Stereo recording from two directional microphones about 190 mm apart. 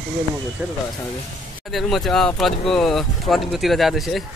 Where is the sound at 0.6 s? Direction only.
5° right (ahead or behind).